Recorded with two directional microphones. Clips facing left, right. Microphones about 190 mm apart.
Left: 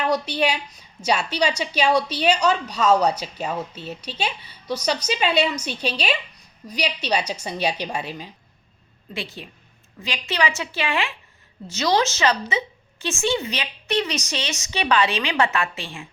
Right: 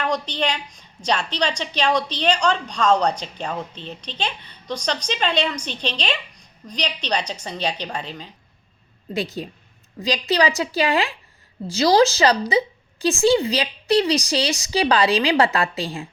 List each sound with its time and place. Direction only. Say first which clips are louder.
0.0 s a woman's voice: left 2 dB; 10° left (ahead or behind)
9.1 s a woman's voice: right 7 dB; 40° right (ahead or behind)